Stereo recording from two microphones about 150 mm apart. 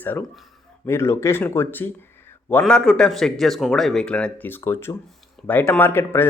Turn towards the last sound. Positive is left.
turn(degrees=15)  # may be behind; listen again after turning